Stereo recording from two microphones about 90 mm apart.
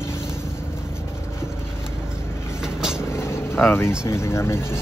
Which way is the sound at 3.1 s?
30° left (ahead or behind).